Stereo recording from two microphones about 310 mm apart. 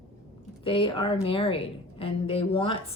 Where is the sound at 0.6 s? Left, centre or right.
Centre.